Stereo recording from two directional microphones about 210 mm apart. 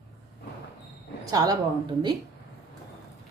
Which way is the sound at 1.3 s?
15° right (ahead or behind).